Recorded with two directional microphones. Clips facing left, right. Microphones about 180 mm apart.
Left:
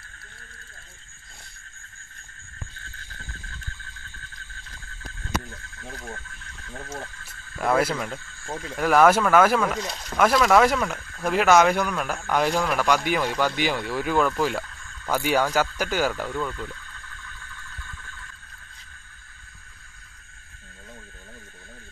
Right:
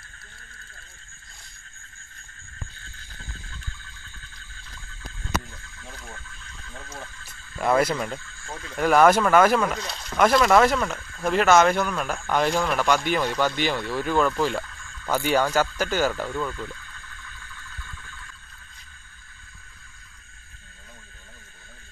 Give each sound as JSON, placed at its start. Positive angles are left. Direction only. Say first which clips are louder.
{"t": 7.5, "sound": "speech", "louder": "right 1 dB", "side_deg": 0}
{"t": 8.5, "sound": "speech", "louder": "left 5 dB", "side_deg": 20}
{"t": 8.7, "sound": "speech", "louder": "right 1 dB", "side_deg": 5}